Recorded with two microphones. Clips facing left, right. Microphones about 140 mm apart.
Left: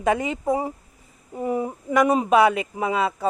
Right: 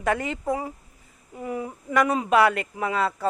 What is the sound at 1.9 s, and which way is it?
Speech, 15° left (ahead or behind).